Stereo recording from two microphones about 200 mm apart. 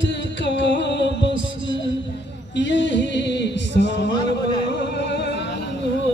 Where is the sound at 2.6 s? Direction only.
60° left (ahead or behind).